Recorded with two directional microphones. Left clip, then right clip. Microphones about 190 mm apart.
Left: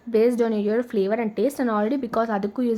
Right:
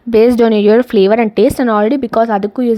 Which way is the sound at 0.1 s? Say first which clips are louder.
Right 11 dB; 50° right (ahead or behind).